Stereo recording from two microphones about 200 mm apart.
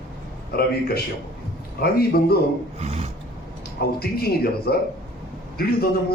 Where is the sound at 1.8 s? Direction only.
55° left (ahead or behind).